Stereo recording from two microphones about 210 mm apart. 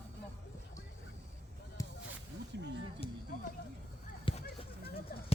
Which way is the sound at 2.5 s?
55° right (ahead or behind).